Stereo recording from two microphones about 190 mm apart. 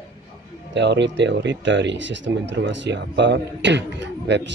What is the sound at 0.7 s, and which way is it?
Speech, 65° right (ahead or behind).